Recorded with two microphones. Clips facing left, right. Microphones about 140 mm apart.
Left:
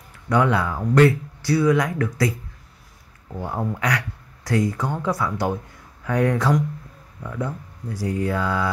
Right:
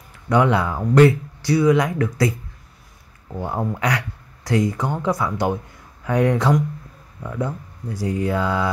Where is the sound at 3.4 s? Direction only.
25° right (ahead or behind).